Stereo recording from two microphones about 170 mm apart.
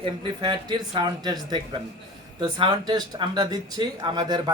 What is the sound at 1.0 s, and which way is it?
Speech, 25° right (ahead or behind).